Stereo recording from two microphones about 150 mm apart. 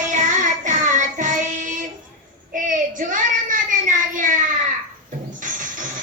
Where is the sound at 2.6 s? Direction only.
60° right (ahead or behind).